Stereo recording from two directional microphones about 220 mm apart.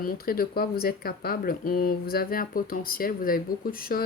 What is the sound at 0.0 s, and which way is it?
Speech, 40° left (ahead or behind).